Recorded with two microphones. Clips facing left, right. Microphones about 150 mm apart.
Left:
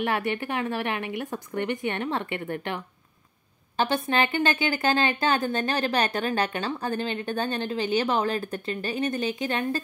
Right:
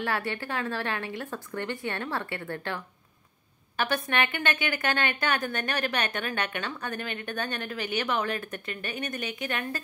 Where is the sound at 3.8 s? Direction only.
30° left (ahead or behind).